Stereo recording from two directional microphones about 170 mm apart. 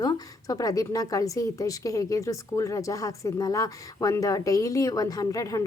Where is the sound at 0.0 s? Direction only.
20° left (ahead or behind).